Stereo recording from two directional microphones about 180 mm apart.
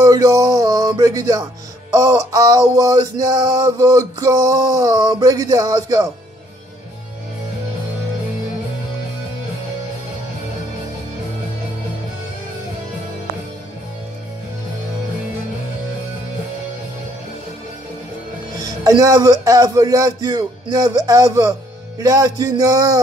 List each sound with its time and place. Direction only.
0.0 s a man's voice: 20° right (ahead or behind)
18.6 s a man's voice: 20° right (ahead or behind)